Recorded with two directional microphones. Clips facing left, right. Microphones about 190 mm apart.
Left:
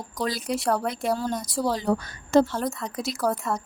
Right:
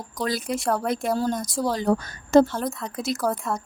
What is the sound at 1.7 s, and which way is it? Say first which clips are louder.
Speech: right 2 dB; 45° right (ahead or behind).